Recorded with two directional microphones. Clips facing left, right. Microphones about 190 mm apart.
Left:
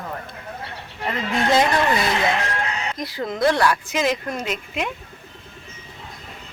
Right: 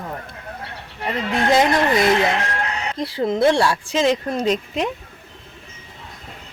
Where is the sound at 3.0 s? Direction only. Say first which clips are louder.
Right 4 dB; 30° right (ahead or behind).